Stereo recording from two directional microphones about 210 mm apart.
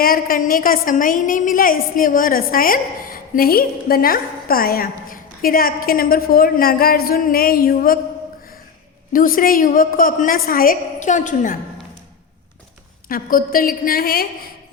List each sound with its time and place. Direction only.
0.0 s a woman's voice: 45° left (ahead or behind)
9.1 s a woman's voice: 40° left (ahead or behind)
13.1 s a woman's voice: 40° left (ahead or behind)